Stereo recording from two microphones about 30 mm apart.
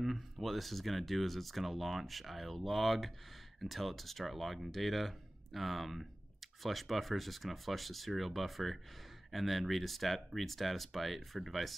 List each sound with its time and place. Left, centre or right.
0.0 s speech: centre